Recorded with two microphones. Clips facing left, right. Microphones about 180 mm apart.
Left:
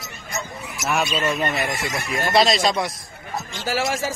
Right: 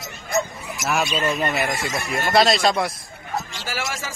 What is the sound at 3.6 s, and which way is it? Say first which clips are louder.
Speech: left 6 dB; 35° left (ahead or behind).